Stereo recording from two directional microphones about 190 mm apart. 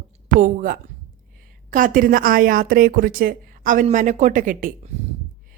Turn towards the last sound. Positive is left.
turn(degrees=-45)  # may be behind; listen again after turning